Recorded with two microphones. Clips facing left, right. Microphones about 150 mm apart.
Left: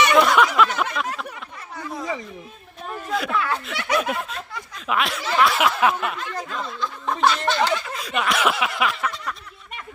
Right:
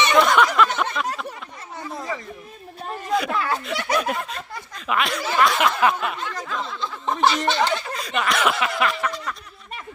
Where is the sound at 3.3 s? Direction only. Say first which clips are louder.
Even; 40° right (ahead or behind).